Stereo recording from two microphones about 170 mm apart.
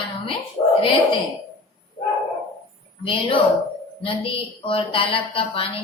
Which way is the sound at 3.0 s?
30° left (ahead or behind).